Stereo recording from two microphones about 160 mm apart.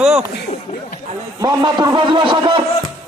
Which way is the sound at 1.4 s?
25° right (ahead or behind).